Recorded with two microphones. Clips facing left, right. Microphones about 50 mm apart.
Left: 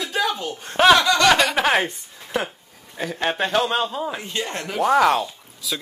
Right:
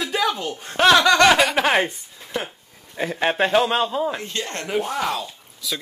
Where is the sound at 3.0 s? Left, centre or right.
Centre.